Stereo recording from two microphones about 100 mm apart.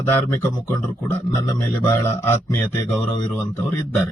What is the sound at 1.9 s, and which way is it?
Speech, 25° left (ahead or behind).